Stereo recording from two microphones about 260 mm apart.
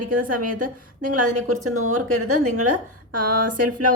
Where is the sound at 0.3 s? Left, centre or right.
Right.